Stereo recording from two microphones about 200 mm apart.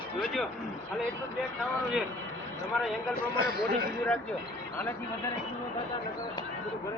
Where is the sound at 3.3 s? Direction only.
50° right (ahead or behind).